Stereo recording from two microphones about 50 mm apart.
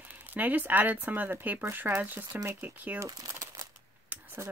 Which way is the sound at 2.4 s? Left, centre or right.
Right.